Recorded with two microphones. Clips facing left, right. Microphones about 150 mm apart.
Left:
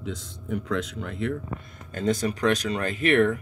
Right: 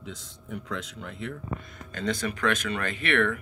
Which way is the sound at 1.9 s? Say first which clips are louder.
Left 5 dB; 45° left (ahead or behind).